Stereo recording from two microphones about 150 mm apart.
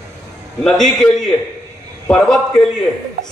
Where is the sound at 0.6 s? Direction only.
5° left (ahead or behind).